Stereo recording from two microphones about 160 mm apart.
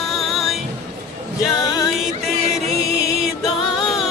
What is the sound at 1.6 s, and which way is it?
Music, 20° left (ahead or behind).